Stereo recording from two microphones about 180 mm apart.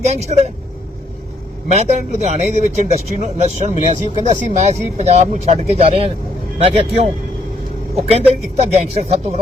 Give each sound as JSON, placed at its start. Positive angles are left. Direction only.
{"t": 0.0, "sound": "a man's voice", "side_deg": -35}
{"t": 1.6, "sound": "a man's voice", "side_deg": -35}
{"t": 8.1, "sound": "a man's voice", "side_deg": -35}